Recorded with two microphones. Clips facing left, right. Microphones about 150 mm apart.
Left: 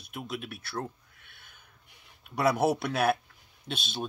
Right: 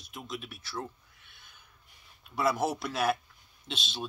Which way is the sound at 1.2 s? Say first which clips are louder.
Left 1 dB; 55° left (ahead or behind).